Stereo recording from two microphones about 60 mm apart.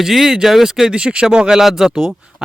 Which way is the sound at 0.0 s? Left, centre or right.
Centre.